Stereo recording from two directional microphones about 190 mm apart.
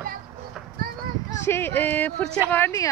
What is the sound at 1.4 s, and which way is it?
Speech, 10° left (ahead or behind).